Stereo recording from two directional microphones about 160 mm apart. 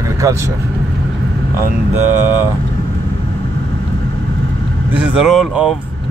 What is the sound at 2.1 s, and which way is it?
Speech, 10° right (ahead or behind).